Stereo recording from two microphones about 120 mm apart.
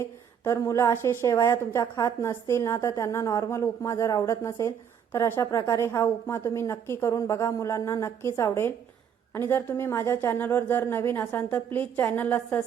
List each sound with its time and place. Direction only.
0.0 s a woman's voice: 25° left (ahead or behind)